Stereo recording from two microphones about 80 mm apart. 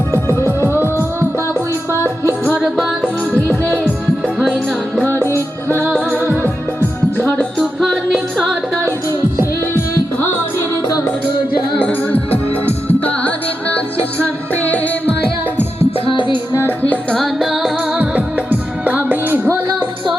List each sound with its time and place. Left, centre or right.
0.1 s music: left
3.0 s music: left
4.4 s music: centre
5.2 s music: left
5.9 s music: left
6.2 s music: right
7.2 s music: left
7.6 s music: centre
9.4 s music: left
12.9 s music: left
14.5 s music: left
16.0 s music: left
17.2 s music: centre
17.9 s music: centre